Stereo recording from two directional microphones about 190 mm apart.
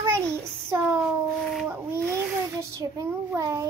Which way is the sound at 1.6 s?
10° right (ahead or behind).